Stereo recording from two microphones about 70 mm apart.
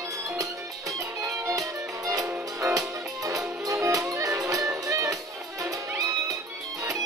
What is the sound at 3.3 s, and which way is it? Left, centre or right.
Music, right.